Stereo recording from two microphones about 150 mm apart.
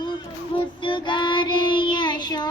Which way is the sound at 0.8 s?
35° left (ahead or behind).